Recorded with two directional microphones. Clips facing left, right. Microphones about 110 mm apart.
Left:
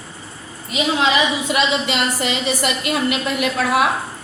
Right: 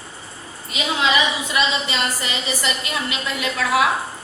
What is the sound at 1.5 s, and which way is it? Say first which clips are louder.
A woman's voice: left 3 dB; 65° left (ahead or behind).